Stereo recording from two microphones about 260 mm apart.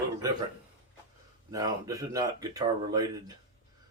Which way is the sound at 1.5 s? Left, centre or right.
Centre.